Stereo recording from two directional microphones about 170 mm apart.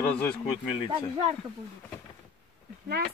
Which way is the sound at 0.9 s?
40° right (ahead or behind).